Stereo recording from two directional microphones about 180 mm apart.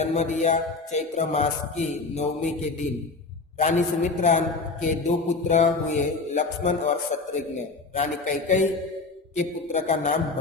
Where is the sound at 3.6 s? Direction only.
40° left (ahead or behind).